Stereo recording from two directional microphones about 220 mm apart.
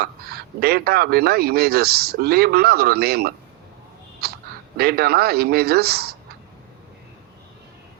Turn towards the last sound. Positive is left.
turn(degrees=-45)  # may be behind; listen again after turning